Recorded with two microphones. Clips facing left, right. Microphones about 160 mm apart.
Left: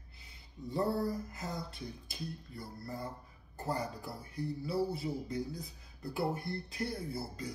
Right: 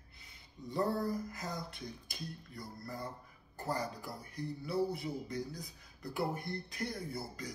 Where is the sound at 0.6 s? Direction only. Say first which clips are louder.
Left 2 dB; centre (ahead or behind).